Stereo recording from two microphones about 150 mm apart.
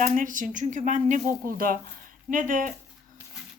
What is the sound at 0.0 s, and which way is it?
Speech, 60° right (ahead or behind).